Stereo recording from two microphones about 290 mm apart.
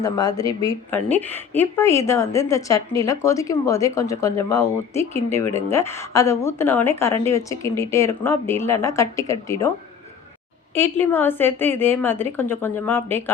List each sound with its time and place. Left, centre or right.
0.0 s a woman's voice: centre
5.5 s speech: right
5.7 s a woman's voice: centre
10.8 s a woman's voice: centre